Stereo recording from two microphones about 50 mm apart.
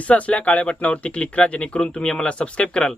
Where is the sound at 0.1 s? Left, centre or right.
Left.